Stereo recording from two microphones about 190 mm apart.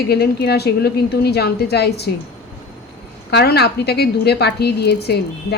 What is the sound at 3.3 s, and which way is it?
A woman's voice, 60° left (ahead or behind).